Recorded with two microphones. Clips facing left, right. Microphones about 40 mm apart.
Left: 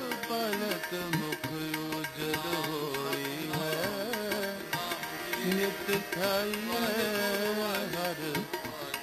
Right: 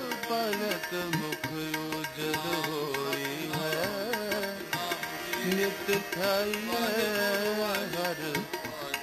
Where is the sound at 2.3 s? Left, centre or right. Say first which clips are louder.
Right 1 dB; centre.